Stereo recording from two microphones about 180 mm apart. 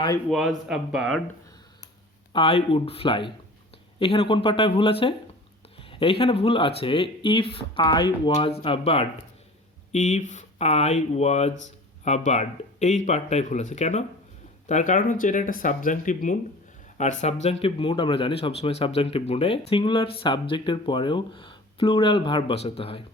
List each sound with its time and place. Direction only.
0.3 s speech: centre (ahead or behind)
2.3 s speech: 30° left (ahead or behind)